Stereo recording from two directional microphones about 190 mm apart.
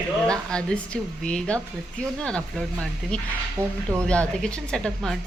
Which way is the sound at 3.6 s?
10° right (ahead or behind).